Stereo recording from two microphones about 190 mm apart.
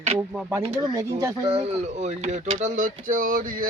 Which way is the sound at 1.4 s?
30° right (ahead or behind).